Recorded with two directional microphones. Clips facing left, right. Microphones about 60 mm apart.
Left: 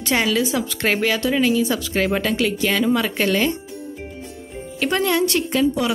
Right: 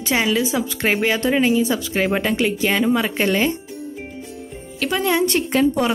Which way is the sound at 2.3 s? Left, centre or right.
Right.